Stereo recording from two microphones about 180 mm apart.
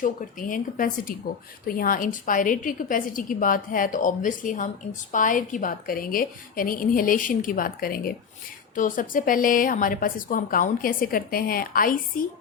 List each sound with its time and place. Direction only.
0.0 s a woman's voice: 50° left (ahead or behind)